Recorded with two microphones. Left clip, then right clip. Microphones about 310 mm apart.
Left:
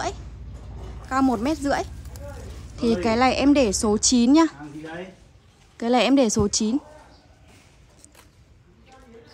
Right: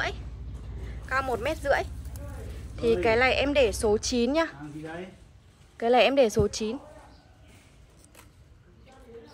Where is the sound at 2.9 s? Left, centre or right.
Centre.